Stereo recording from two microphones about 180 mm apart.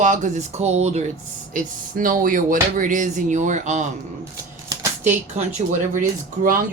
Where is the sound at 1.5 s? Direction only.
50° right (ahead or behind).